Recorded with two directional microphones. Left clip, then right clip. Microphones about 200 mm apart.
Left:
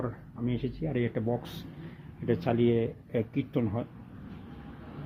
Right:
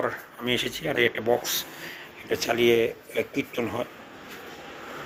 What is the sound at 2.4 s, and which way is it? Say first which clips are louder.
Speech: right 8 dB; 5° left (ahead or behind).